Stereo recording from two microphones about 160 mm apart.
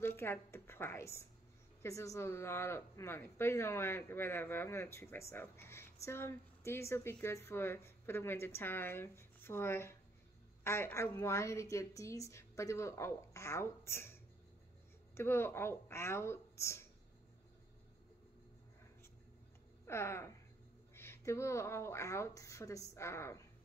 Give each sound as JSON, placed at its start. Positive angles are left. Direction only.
{"t": 0.0, "sound": "a woman's voice", "side_deg": 15}
{"t": 15.1, "sound": "speech", "side_deg": 15}
{"t": 19.9, "sound": "speech", "side_deg": 15}